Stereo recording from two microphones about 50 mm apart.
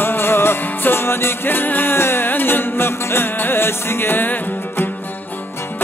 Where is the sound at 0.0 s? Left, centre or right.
Left.